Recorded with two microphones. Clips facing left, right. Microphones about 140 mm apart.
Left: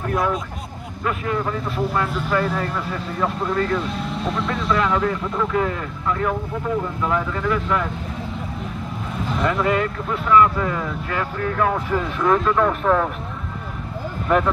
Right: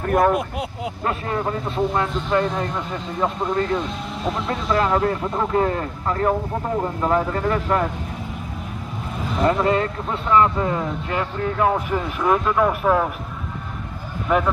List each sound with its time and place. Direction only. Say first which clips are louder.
0.0 s speech: right 4 dB; 55° right (ahead or behind)
1.0 s speech: left 1 dB; 35° right (ahead or behind)
2.5 s speech: even; 20° right (ahead or behind)
3.9 s speech: left 1 dB; centre (ahead or behind)
4.6 s speech: right 2 dB; 35° right (ahead or behind)
9.4 s speech: right 2 dB; 30° right (ahead or behind); by 13.1 s 10° right (ahead or behind)
14.3 s speech: left 1 dB; 5° right (ahead or behind)